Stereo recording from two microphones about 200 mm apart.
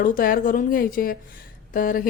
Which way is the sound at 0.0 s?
45° left (ahead or behind).